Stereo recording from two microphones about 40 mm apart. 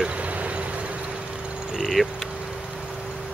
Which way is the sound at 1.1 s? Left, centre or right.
Right.